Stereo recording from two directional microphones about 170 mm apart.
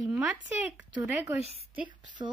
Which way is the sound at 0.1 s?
5° right (ahead or behind).